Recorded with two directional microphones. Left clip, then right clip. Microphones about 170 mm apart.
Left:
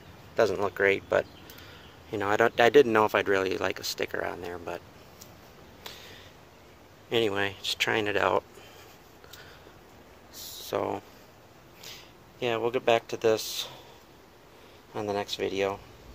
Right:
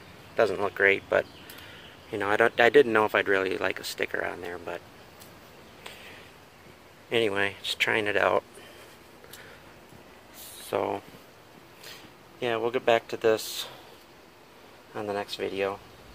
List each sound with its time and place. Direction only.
0.4 s speech: 10° left (ahead or behind)
7.1 s speech: 5° left (ahead or behind)
10.7 s speech: centre (ahead or behind)
15.0 s speech: 20° left (ahead or behind)